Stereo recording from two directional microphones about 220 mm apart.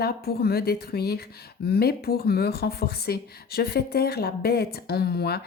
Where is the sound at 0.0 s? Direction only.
45° left (ahead or behind).